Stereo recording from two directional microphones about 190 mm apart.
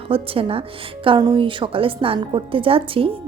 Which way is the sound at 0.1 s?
30° right (ahead or behind).